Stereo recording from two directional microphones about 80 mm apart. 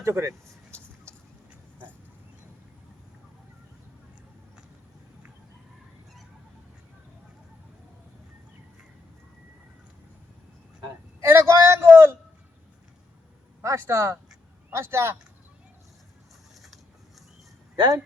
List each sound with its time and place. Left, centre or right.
0.0 s speech: right
11.2 s a sound: right
13.6 s speech: right
17.7 s speech: right